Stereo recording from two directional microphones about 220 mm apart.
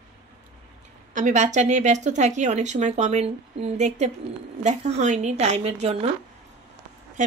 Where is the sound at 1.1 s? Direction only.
35° right (ahead or behind).